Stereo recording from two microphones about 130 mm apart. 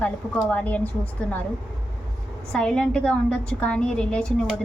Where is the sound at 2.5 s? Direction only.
5° left (ahead or behind).